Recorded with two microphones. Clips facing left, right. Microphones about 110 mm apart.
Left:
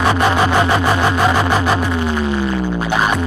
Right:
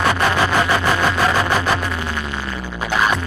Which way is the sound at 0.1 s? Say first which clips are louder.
Left 3 dB; 25° left (ahead or behind).